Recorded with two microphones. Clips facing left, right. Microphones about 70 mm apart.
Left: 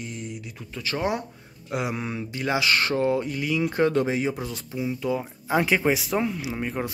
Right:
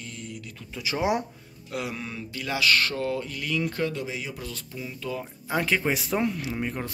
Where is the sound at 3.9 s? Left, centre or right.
Left.